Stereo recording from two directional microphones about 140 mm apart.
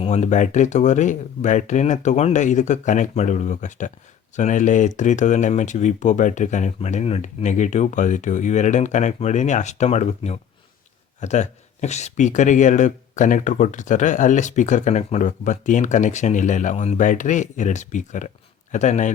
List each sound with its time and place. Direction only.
0.0 s speech: 55° left (ahead or behind)